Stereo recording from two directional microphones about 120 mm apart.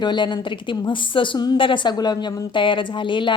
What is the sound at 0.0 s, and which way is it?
A woman's voice, 40° left (ahead or behind).